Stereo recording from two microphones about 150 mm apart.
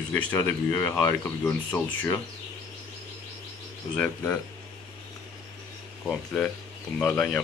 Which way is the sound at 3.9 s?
10° left (ahead or behind).